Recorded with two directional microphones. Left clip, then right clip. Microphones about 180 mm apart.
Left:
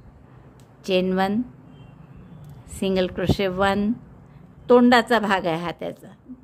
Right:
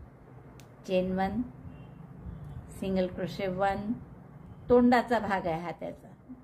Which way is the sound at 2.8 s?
45° left (ahead or behind).